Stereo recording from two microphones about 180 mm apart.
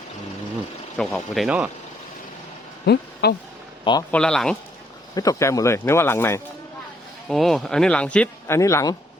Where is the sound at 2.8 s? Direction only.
65° left (ahead or behind).